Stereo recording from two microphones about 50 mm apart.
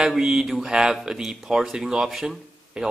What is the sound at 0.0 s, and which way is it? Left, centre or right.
Speech, centre.